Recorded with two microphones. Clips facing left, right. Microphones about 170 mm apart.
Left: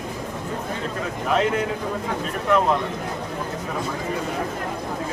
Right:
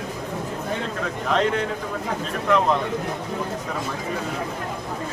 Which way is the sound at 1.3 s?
5° left (ahead or behind).